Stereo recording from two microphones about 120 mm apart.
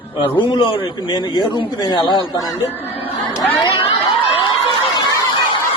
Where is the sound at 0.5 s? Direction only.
45° left (ahead or behind).